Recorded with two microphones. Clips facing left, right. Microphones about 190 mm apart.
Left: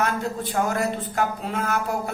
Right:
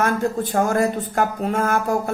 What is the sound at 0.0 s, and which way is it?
A man's voice, 50° right (ahead or behind).